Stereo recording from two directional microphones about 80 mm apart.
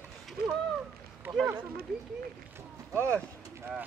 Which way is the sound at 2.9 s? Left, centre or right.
Right.